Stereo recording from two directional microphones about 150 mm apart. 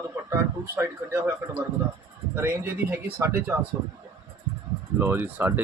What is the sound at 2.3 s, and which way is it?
Speech, 15° right (ahead or behind).